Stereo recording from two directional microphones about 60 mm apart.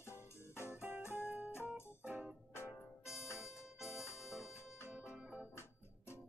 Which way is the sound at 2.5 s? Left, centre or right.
Left.